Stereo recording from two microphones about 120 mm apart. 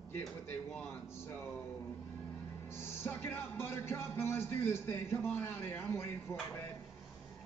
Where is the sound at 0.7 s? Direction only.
20° left (ahead or behind).